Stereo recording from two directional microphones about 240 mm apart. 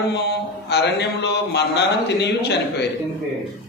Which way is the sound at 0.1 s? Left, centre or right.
Left.